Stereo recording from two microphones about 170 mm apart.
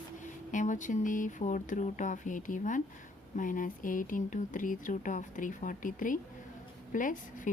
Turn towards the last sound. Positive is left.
turn(degrees=50)  # may be behind; listen again after turning